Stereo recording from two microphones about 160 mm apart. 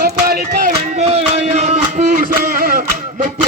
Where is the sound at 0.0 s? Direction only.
70° right (ahead or behind).